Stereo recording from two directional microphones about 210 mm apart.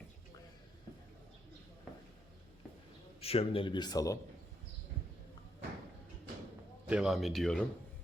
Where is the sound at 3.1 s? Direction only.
30° left (ahead or behind).